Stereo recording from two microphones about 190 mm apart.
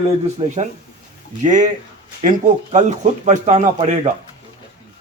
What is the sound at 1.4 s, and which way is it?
A man's voice, 40° right (ahead or behind).